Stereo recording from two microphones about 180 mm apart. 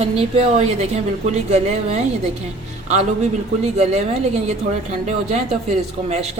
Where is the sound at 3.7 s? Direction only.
40° right (ahead or behind).